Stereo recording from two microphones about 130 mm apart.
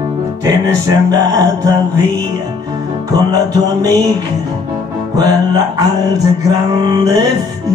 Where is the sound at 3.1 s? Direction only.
30° right (ahead or behind).